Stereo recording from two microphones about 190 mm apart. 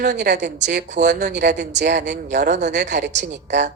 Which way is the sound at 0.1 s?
65° right (ahead or behind).